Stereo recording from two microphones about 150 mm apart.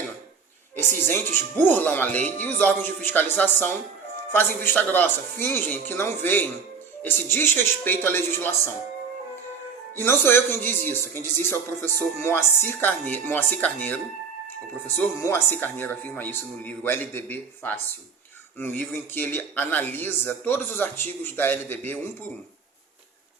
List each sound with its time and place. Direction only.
1.0 s speech: 15° left (ahead or behind)
9.9 s speech: 15° left (ahead or behind)